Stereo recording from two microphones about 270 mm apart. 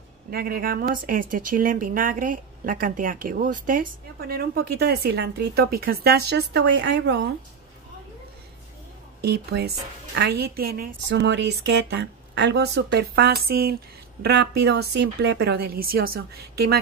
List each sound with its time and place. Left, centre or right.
0.3 s speech: right
9.2 s speech: right